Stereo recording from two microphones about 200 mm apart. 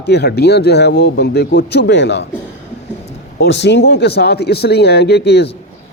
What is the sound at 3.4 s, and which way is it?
A man's voice, 60° left (ahead or behind).